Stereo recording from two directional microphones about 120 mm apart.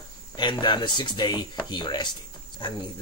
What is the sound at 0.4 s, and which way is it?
Speech, 40° left (ahead or behind).